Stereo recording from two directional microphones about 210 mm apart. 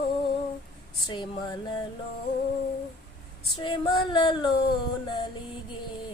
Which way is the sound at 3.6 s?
20° left (ahead or behind).